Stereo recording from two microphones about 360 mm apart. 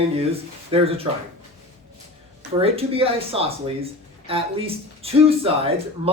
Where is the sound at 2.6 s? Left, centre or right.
Centre.